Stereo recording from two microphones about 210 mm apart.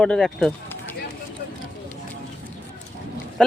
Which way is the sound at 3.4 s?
5° left (ahead or behind).